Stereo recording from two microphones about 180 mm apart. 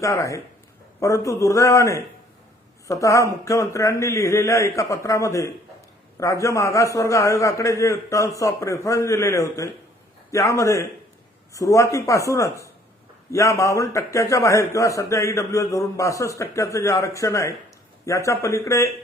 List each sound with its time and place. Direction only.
0.0 s a man's voice: 15° left (ahead or behind)